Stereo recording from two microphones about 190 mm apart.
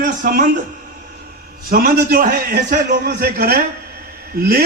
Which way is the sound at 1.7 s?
50° right (ahead or behind).